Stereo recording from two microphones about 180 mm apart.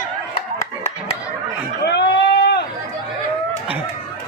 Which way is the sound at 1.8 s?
70° left (ahead or behind).